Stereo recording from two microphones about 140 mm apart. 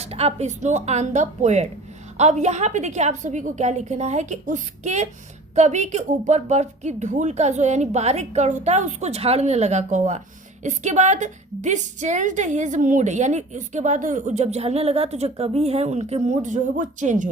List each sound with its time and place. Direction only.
0.0 s a woman's voice: 50° right (ahead or behind)